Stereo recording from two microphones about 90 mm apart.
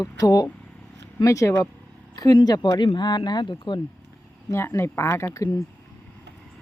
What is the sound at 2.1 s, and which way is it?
Speech, 50° left (ahead or behind).